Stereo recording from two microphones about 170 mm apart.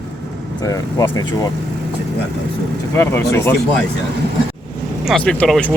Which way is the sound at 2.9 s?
15° left (ahead or behind).